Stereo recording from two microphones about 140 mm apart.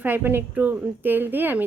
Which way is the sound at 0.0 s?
15° right (ahead or behind).